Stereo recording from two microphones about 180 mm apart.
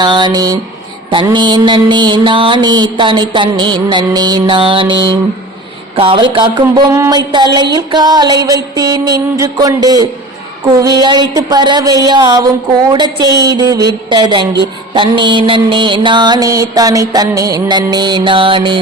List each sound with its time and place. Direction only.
0.0 s a woman's voice: 25° right (ahead or behind)